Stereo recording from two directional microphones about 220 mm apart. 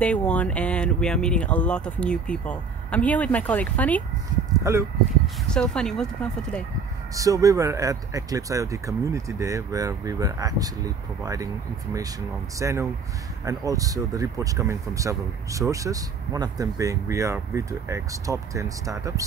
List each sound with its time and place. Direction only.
0.0 s speech: 5° left (ahead or behind)
5.5 s speech: 5° left (ahead or behind)
7.2 s speech: 15° right (ahead or behind)